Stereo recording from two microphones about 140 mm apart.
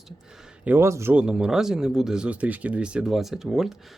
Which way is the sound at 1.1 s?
5° right (ahead or behind).